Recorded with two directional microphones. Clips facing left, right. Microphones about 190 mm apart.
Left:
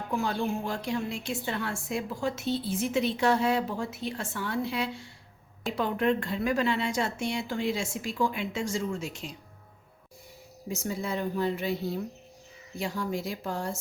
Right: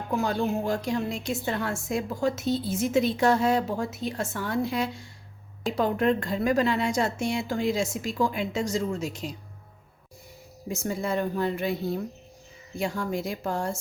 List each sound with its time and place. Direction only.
0.2 s a woman's voice: 45° right (ahead or behind)
10.7 s speech: 55° right (ahead or behind)
12.8 s a woman's voice: 50° right (ahead or behind)